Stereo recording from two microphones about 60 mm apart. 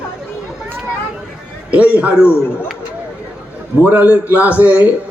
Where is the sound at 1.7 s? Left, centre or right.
Right.